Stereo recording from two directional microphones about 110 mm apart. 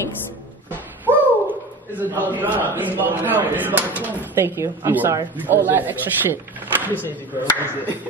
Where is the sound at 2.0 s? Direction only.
15° right (ahead or behind).